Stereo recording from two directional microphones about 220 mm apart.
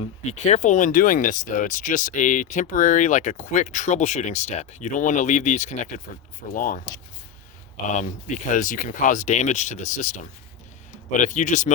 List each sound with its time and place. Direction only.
0.0 s speech: 30° left (ahead or behind)
7.9 s speech: 30° left (ahead or behind)